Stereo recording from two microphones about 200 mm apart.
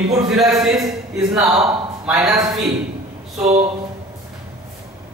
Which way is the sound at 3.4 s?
35° right (ahead or behind).